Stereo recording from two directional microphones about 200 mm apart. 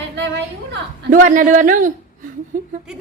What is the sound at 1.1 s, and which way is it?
Speech, 40° right (ahead or behind).